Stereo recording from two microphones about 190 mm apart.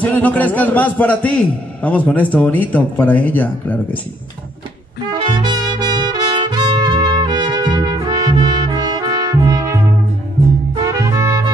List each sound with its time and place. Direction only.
0.0 s speech: 10° left (ahead or behind)
5.1 s music: 25° right (ahead or behind)